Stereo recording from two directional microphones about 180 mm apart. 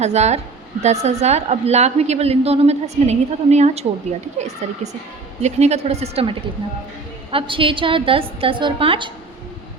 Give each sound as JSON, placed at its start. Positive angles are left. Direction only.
{"t": 0.0, "sound": "a woman's voice", "side_deg": -35}